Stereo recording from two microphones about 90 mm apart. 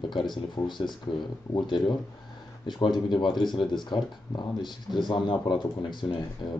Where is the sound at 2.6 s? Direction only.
55° left (ahead or behind).